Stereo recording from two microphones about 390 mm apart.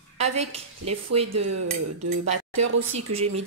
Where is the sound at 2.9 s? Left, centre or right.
Centre.